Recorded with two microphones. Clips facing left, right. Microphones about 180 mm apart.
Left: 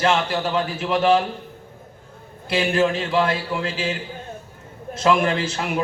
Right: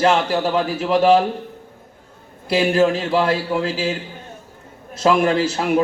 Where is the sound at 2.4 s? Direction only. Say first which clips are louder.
Right 4 dB; 40° right (ahead or behind).